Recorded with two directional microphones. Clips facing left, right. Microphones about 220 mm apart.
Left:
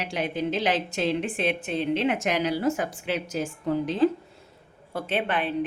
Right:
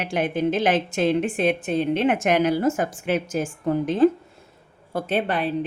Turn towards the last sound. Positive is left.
turn(degrees=-40)  # may be behind; listen again after turning